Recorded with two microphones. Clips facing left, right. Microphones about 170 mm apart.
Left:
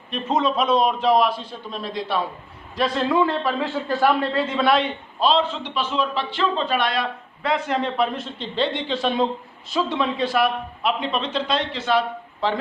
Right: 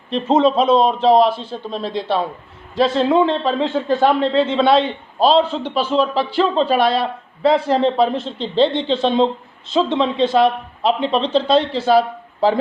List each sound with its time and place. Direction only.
0.1 s a man's voice: 30° right (ahead or behind)